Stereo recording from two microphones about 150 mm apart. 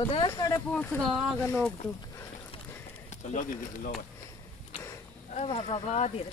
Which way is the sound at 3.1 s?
55° left (ahead or behind).